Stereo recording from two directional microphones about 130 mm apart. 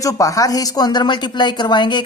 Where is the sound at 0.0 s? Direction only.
25° left (ahead or behind).